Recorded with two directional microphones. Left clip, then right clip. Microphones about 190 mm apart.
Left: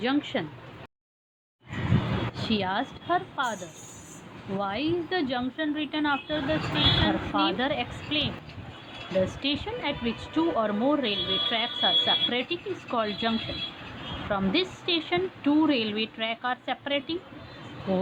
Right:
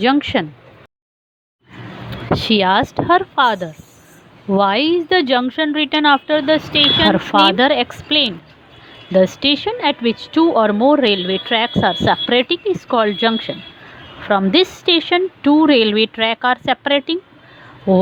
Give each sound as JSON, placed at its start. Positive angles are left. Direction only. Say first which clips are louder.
{"t": 0.0, "sound": "a woman's voice", "louder": "right 12 dB", "side_deg": -40}
{"t": 2.3, "sound": "a woman's voice", "louder": "right 17 dB", "side_deg": -45}